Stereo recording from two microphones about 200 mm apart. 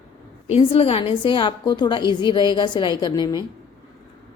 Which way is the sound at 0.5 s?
30° left (ahead or behind).